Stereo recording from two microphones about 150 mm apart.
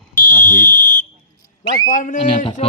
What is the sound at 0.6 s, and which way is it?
Fire alarm, 60° left (ahead or behind).